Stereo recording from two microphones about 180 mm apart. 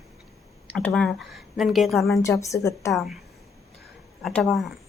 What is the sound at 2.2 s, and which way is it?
Speech, 15° left (ahead or behind).